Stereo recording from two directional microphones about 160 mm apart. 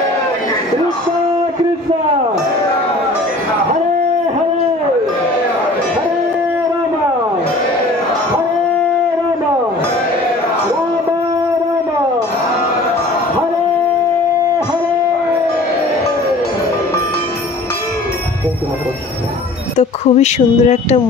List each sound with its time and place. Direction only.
19.8 s speech: 45° left (ahead or behind)